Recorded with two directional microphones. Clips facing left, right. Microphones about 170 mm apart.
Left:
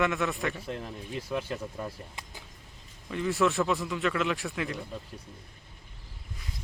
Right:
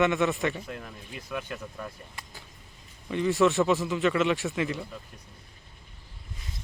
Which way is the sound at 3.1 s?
Centre (ahead or behind).